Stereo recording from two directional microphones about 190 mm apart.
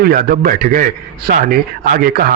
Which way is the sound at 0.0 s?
50° right (ahead or behind).